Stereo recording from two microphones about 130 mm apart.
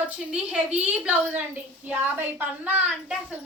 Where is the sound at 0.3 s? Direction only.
10° right (ahead or behind).